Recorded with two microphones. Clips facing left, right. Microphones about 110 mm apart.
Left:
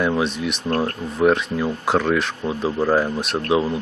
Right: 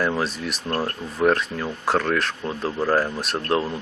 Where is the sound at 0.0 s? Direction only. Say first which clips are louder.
Left 3 dB; centre (ahead or behind).